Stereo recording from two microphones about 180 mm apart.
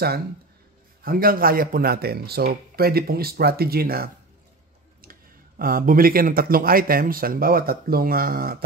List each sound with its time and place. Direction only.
1.0 s speech: 55° right (ahead or behind)
5.6 s speech: 55° right (ahead or behind)